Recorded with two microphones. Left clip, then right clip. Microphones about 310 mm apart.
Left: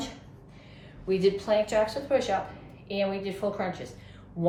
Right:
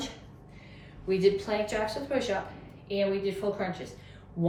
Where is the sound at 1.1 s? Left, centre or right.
Centre.